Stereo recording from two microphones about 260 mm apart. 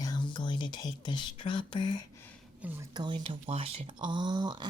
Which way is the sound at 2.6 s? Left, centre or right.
Centre.